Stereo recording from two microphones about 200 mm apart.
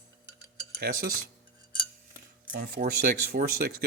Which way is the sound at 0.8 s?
45° right (ahead or behind).